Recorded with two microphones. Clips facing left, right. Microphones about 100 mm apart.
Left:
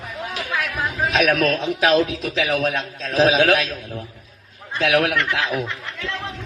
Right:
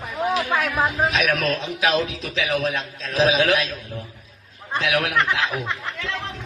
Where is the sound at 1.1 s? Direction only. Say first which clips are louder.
Left 4 dB; 55° left (ahead or behind).